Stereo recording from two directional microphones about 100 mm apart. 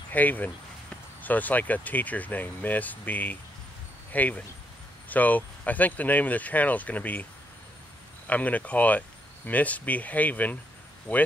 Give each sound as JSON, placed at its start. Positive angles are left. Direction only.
{"t": 0.1, "sound": "speech", "side_deg": 15}
{"t": 8.3, "sound": "speech", "side_deg": 15}